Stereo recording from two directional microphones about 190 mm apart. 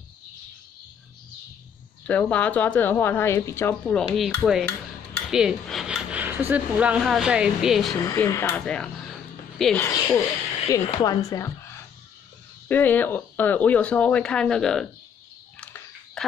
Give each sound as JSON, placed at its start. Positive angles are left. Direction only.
{"t": 2.0, "sound": "speech", "side_deg": 10}
{"t": 8.0, "sound": "speech", "side_deg": 15}
{"t": 9.8, "sound": "speech", "side_deg": 15}
{"t": 12.6, "sound": "speech", "side_deg": 10}
{"t": 15.6, "sound": "a sound", "side_deg": 5}